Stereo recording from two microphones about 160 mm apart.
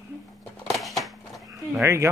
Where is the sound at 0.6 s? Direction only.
Centre (ahead or behind).